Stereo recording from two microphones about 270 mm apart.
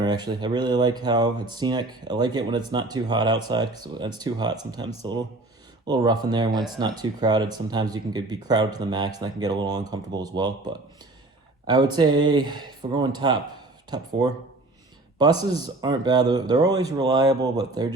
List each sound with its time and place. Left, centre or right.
0.0 s speech: centre